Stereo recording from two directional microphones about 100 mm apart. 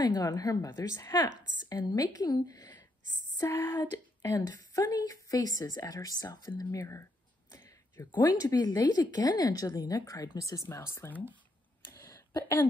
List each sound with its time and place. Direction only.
0.0 s speech: 40° left (ahead or behind)
0.7 s speech: 25° left (ahead or behind)
1.8 s speech: 40° left (ahead or behind)
3.3 s a sound: 30° left (ahead or behind)
4.3 s speech: 35° left (ahead or behind)
8.1 s speech: 45° left (ahead or behind)
11.0 s speech: 20° left (ahead or behind)
11.8 s a sound: 25° left (ahead or behind)